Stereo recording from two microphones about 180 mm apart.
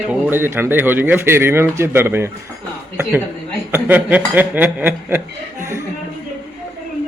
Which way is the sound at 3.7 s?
10° right (ahead or behind).